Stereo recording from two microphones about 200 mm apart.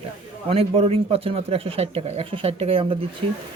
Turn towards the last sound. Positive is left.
turn(degrees=-30)  # may be behind; listen again after turning